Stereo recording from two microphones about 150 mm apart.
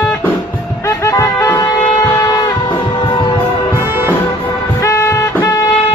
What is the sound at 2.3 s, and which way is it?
Music, 30° left (ahead or behind).